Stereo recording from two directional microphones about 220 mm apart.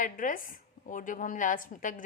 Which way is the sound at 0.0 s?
35° left (ahead or behind).